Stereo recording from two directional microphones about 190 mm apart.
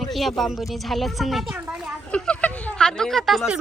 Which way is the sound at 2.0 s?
5° left (ahead or behind).